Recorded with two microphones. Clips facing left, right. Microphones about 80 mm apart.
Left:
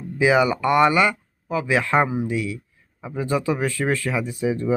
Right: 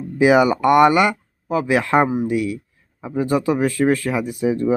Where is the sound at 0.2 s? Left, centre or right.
Right.